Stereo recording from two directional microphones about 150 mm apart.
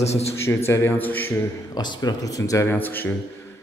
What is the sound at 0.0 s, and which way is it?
Speech, 45° left (ahead or behind).